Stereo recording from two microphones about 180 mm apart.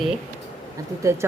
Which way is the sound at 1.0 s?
15° right (ahead or behind).